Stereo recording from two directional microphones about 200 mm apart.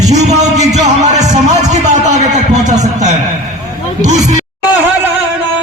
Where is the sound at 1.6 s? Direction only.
35° right (ahead or behind).